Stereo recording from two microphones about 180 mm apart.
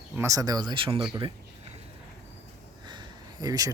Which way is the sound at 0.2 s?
20° right (ahead or behind).